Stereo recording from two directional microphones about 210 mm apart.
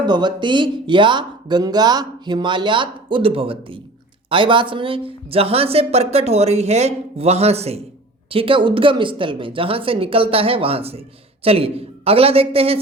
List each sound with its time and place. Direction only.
0.0 s speech: 20° right (ahead or behind)